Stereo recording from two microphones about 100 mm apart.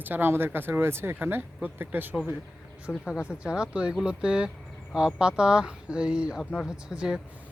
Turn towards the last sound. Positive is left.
turn(degrees=-5)  # may be behind; listen again after turning